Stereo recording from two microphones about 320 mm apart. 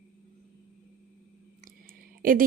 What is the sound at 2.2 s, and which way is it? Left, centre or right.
Speech, right.